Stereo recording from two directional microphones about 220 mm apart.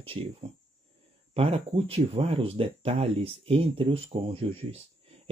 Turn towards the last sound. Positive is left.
turn(degrees=-25)  # may be behind; listen again after turning